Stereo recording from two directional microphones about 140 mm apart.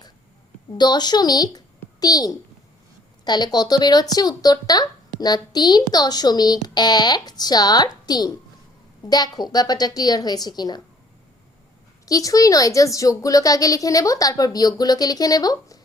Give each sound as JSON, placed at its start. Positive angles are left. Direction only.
{"t": 0.8, "sound": "a child's voice", "side_deg": 30}
{"t": 12.0, "sound": "speech", "side_deg": 25}